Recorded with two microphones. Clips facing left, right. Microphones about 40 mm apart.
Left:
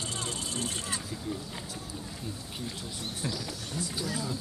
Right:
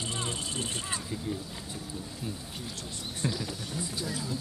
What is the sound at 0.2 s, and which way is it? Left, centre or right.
Vehicle, right.